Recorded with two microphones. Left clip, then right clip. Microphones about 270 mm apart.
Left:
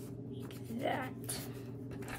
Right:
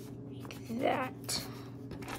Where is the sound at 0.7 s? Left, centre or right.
Centre.